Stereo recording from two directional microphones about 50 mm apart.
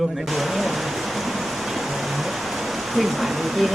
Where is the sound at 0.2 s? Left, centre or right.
Centre.